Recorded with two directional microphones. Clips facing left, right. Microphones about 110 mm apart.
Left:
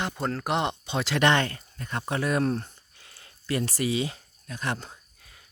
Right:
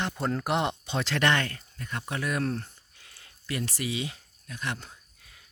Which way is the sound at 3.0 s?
30° left (ahead or behind).